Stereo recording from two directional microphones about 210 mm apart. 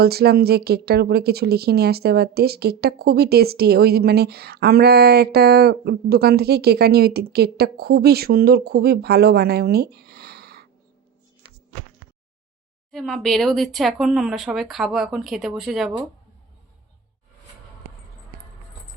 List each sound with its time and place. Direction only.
0.0 s speech: 50° right (ahead or behind)
12.9 s speech: centre (ahead or behind)